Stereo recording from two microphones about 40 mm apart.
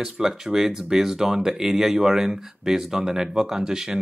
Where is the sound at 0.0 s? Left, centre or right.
Centre.